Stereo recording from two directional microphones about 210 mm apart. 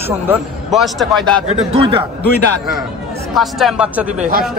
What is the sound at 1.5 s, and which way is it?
Speech, 25° right (ahead or behind).